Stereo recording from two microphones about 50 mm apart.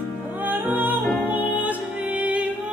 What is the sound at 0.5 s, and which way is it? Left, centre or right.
Music, right.